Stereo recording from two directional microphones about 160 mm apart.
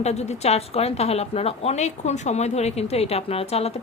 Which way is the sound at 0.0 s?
45° left (ahead or behind).